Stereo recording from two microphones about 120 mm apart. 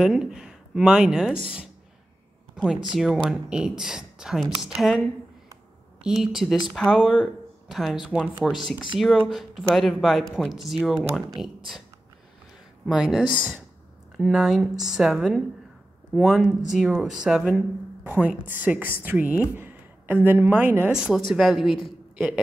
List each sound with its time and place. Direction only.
0.0 s speech: 5° right (ahead or behind)
2.6 s speech: 5° right (ahead or behind)
12.8 s a woman's voice: 5° right (ahead or behind)
19.5 s a sound: 15° right (ahead or behind)
20.2 s a woman's voice: 15° right (ahead or behind)
20.9 s speech: 5° right (ahead or behind)